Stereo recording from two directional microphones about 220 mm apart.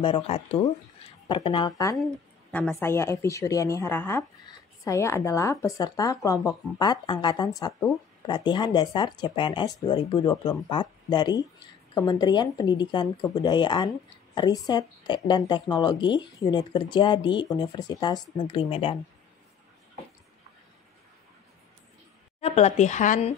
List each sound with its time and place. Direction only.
0.0 s a woman's voice: 25° left (ahead or behind)
22.4 s speech: 30° left (ahead or behind)